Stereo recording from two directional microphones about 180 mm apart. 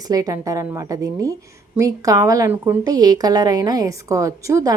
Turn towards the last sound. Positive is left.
turn(degrees=-15)  # may be behind; listen again after turning